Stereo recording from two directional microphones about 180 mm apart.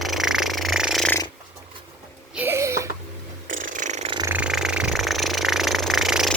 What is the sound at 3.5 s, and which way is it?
Mechanisms, 45° right (ahead or behind).